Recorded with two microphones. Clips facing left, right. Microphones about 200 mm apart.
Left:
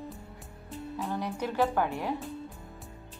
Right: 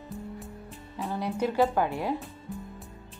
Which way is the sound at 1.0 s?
10° right (ahead or behind).